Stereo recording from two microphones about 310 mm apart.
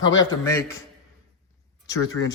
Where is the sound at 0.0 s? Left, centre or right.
Left.